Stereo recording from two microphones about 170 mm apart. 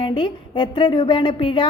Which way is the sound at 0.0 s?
30° left (ahead or behind).